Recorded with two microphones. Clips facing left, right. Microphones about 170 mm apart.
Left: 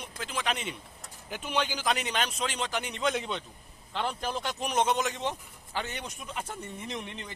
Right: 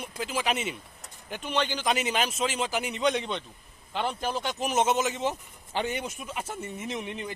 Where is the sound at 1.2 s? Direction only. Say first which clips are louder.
Right 2 dB; 5° left (ahead or behind).